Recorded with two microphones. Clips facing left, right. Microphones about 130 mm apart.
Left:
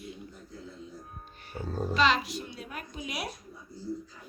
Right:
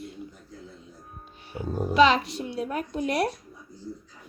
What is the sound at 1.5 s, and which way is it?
Speech, 10° right (ahead or behind).